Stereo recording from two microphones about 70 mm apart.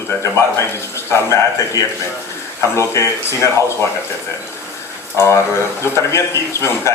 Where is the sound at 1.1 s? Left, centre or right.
Left.